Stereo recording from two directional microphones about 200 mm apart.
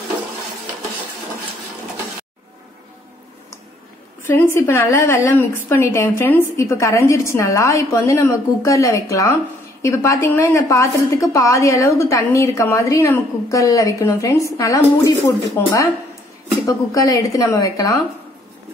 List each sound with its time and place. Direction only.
4.2 s a woman's voice: 10° left (ahead or behind)